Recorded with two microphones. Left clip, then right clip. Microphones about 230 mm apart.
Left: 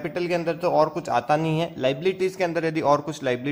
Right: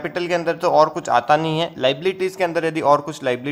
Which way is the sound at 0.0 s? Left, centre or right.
Right.